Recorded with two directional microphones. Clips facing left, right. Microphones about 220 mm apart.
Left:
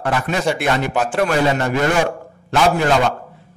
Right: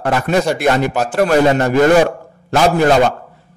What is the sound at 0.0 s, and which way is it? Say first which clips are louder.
A man's voice: right 4 dB; 40° right (ahead or behind).